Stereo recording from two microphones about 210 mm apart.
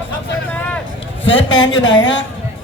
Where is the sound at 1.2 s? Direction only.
60° left (ahead or behind).